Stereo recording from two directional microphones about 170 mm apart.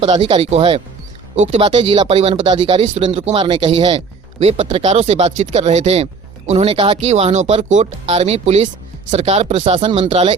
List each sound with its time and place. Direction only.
0.0 s speech: 35° right (ahead or behind)